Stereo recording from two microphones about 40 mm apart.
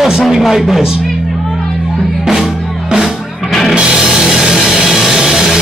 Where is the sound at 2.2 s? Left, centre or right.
Centre.